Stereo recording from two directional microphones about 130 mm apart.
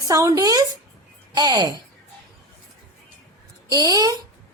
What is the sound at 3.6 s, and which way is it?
Speech, 30° right (ahead or behind).